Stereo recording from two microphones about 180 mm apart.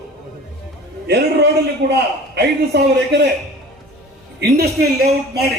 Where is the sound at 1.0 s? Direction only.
65° right (ahead or behind).